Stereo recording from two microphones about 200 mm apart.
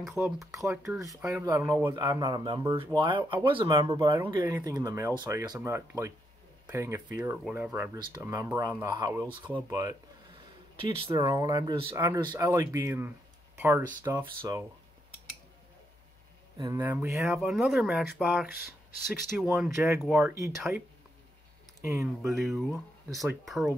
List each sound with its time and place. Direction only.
0.4 s speech: centre (ahead or behind)
0.7 s speech: 15° right (ahead or behind)
7.9 s speech: 20° right (ahead or behind)
11.9 s speech: 10° right (ahead or behind)
16.5 s speech: 15° right (ahead or behind)
22.2 s speech: centre (ahead or behind)